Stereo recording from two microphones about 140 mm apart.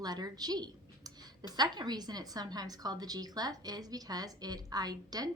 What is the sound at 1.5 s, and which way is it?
A woman's voice, 30° right (ahead or behind).